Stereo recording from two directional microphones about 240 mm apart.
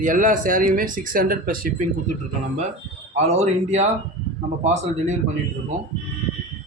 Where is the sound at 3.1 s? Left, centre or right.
Right.